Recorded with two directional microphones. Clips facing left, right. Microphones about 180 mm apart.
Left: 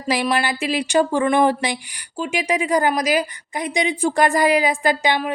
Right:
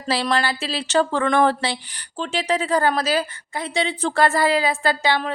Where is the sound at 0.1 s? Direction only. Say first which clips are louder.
Left 1 dB; 15° left (ahead or behind).